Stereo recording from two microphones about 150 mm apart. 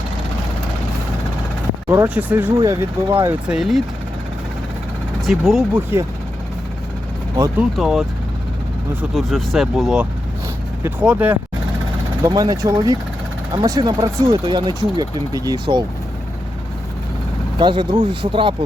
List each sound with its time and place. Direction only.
2.0 s speech: 10° right (ahead or behind)
3.5 s speech: centre (ahead or behind)
5.2 s speech: centre (ahead or behind)
5.7 s speech: 15° right (ahead or behind)
7.5 s speech: 5° right (ahead or behind)
9.1 s speech: centre (ahead or behind)
12.2 s speech: 25° right (ahead or behind)
17.6 s speech: 30° right (ahead or behind)